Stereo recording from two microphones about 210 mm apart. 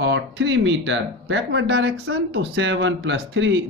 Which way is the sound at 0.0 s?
60° right (ahead or behind).